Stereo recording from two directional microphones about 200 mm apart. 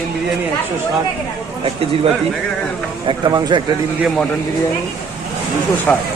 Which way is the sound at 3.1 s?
25° right (ahead or behind).